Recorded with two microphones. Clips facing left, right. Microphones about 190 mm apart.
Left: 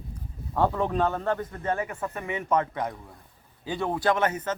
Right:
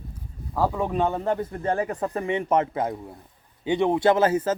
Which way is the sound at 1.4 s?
30° right (ahead or behind).